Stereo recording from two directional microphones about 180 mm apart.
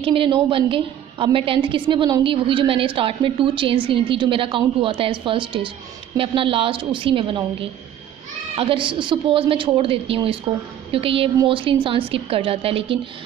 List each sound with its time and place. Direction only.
0.0 s a woman's voice: 30° right (ahead or behind)
8.5 s a woman's voice: 30° right (ahead or behind)